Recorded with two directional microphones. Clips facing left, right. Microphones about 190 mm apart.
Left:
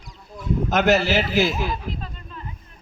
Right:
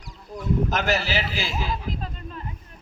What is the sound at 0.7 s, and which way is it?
Speech, 55° left (ahead or behind).